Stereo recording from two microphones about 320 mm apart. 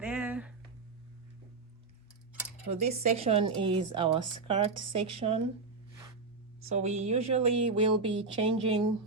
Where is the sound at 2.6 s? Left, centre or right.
Centre.